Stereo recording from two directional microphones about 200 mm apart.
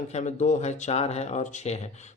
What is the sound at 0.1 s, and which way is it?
A man's voice, 35° left (ahead or behind).